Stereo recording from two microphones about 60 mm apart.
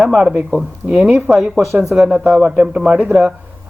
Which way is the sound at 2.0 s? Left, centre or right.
Right.